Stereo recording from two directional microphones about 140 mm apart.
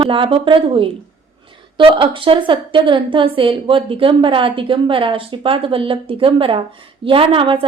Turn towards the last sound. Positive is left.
turn(degrees=-40)  # may be behind; listen again after turning